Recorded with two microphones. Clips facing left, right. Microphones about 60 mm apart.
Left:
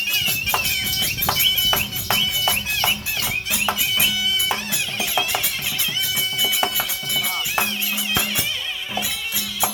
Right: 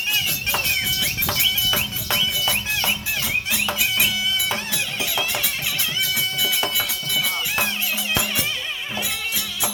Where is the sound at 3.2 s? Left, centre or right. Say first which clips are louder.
Left 1 dB; centre.